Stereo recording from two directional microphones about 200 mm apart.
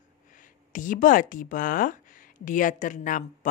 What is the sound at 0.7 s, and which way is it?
Speech, 40° left (ahead or behind).